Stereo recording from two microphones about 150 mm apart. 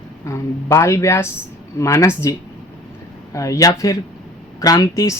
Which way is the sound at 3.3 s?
20° left (ahead or behind).